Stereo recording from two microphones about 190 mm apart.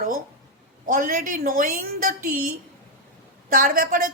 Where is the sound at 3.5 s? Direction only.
45° right (ahead or behind).